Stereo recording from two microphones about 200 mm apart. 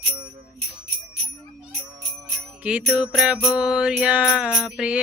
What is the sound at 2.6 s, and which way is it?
Music, 5° right (ahead or behind).